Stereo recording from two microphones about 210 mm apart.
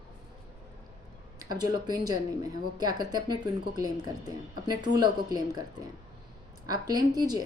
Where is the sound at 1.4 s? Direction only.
20° right (ahead or behind).